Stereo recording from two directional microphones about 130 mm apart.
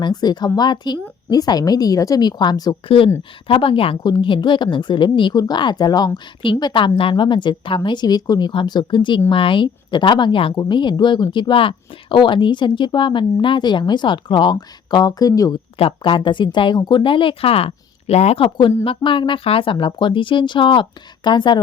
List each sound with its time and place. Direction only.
0.0 s speech: 30° left (ahead or behind)
2.8 s speech: 45° left (ahead or behind); by 15.5 s 30° left (ahead or behind)
15.8 s speech: 40° left (ahead or behind)
18.4 s speech: 35° left (ahead or behind)